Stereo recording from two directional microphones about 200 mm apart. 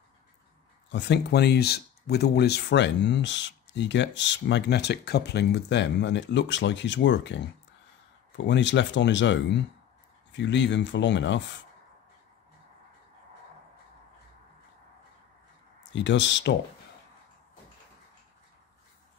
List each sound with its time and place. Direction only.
0.9 s speech: 60° left (ahead or behind)
8.5 s speech: 65° left (ahead or behind)
15.8 s speech: 65° left (ahead or behind)